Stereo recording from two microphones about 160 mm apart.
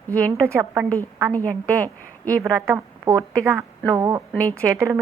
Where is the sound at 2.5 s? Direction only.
20° right (ahead or behind).